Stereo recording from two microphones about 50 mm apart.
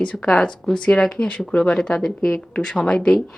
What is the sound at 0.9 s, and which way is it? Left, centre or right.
Speech, centre.